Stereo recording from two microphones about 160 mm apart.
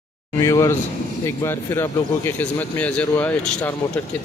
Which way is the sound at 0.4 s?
20° left (ahead or behind).